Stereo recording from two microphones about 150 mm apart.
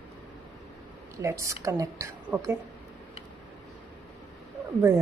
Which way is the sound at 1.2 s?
20° right (ahead or behind).